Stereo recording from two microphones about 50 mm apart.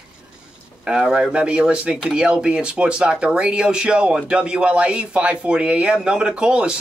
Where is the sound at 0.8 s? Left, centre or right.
Centre.